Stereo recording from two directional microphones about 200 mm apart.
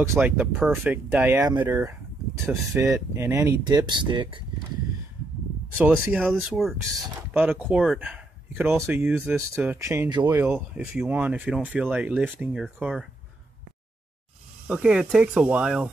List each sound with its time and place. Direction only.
0.0 s speech: 10° right (ahead or behind)
5.8 s speech: 5° right (ahead or behind)
10.3 s speech: 5° right (ahead or behind)
14.7 s speech: 5° right (ahead or behind)